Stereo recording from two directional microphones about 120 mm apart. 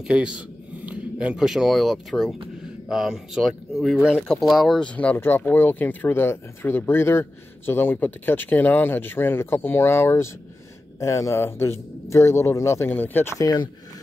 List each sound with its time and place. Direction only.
0.0 s a man's voice: 5° right (ahead or behind); by 13.3 s 15° left (ahead or behind)
13.4 s speech: 35° left (ahead or behind)